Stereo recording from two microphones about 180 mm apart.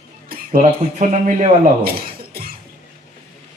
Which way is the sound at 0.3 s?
55° right (ahead or behind).